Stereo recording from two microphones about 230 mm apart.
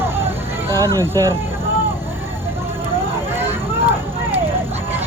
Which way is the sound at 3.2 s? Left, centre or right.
Centre.